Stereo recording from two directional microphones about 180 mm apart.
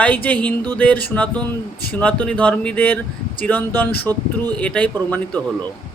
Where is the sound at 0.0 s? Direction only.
10° left (ahead or behind).